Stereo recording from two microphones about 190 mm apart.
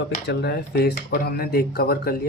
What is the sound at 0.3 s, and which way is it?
Speech, 60° left (ahead or behind).